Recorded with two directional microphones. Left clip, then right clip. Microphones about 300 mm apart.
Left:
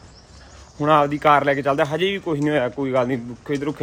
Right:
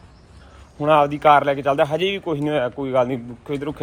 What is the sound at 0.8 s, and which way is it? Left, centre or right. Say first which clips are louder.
Speech: right 1 dB; centre.